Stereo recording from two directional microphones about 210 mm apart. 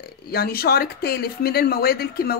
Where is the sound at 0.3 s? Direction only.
45° left (ahead or behind).